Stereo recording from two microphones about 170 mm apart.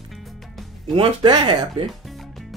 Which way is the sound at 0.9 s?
30° right (ahead or behind).